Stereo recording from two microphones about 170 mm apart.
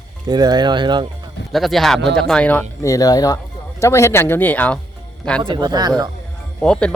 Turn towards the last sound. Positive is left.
turn(degrees=5)  # may be behind; listen again after turning